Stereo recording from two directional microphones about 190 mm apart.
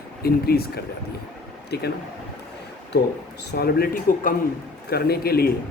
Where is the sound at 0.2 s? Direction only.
55° left (ahead or behind).